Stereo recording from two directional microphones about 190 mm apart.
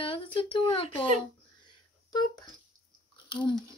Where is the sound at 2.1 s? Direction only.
20° left (ahead or behind).